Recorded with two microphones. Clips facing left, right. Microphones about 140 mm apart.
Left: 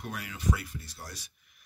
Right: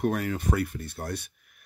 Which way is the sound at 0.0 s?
50° right (ahead or behind).